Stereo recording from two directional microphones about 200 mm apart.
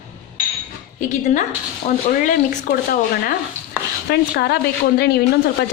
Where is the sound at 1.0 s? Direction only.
35° left (ahead or behind).